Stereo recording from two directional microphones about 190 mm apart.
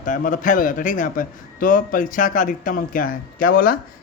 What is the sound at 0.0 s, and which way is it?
A man's voice, 45° left (ahead or behind).